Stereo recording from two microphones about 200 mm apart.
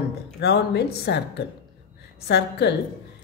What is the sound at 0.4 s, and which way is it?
Speech, 55° left (ahead or behind).